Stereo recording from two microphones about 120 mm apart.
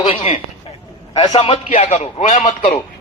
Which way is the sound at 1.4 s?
55° left (ahead or behind).